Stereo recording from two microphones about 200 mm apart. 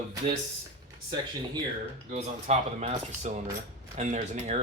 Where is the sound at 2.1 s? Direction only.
35° right (ahead or behind).